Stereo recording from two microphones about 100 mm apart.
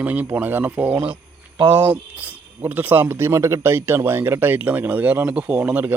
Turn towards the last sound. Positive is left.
turn(degrees=-15)  # may be behind; listen again after turning